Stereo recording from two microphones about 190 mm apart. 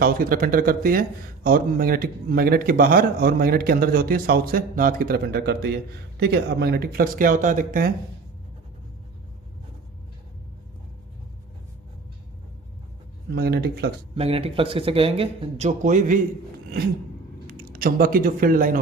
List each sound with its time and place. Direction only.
0.0 s a man's voice: 50° right (ahead or behind)
13.3 s speech: 55° right (ahead or behind)
14.2 s speech: 30° right (ahead or behind)
17.4 s speech: 50° right (ahead or behind)